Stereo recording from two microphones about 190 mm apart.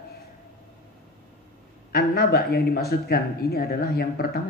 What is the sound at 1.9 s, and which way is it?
Speech, 55° left (ahead or behind).